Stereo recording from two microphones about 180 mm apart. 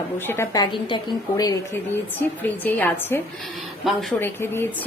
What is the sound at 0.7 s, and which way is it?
Speech, 25° left (ahead or behind).